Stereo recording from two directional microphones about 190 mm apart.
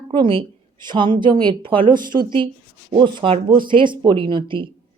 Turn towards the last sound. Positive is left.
turn(degrees=-25)  # may be behind; listen again after turning